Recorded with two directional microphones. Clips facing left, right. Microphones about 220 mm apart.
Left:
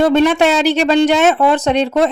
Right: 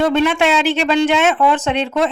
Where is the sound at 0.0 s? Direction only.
40° left (ahead or behind).